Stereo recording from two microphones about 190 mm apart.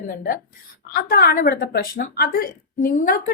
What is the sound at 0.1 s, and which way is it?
Speech, 45° left (ahead or behind).